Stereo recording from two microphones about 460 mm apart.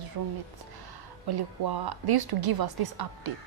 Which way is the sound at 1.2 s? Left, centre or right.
Right.